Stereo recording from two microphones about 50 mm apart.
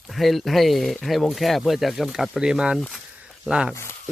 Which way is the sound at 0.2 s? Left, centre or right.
Centre.